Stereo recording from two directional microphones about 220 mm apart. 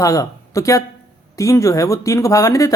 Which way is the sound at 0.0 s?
15° left (ahead or behind).